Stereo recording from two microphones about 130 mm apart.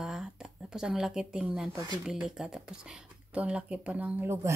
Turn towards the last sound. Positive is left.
turn(degrees=-20)  # may be behind; listen again after turning